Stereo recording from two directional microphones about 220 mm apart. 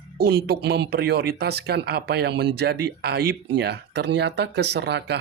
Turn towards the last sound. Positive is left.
turn(degrees=-50)  # may be behind; listen again after turning